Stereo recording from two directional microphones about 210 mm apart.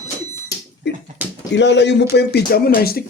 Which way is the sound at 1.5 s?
55° left (ahead or behind).